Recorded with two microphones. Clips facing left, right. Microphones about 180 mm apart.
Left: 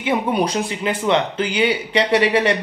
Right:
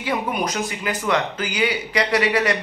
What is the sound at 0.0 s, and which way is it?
Speech, 25° left (ahead or behind).